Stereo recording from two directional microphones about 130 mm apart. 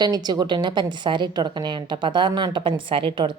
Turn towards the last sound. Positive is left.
turn(degrees=-40)  # may be behind; listen again after turning